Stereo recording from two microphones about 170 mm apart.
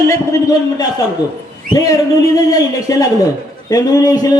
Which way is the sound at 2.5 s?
20° left (ahead or behind).